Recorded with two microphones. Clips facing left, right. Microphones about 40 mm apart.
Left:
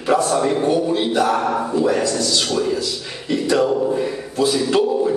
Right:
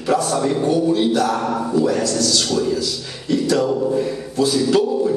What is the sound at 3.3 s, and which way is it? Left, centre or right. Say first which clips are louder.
Music: even; left.